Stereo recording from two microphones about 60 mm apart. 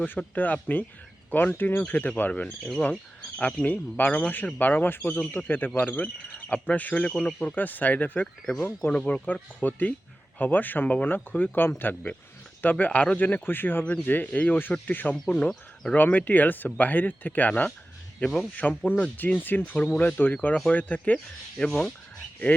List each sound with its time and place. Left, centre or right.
0.0 s speech: left
2.6 s speech: centre
7.4 s speech: left
12.7 s speech: left
15.1 s speech: centre
16.0 s speech: left
18.2 s speech: centre
19.1 s speech: left
21.6 s speech: centre